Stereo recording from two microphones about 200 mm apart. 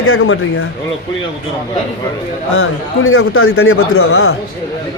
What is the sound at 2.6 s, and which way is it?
A man's voice, 90° left.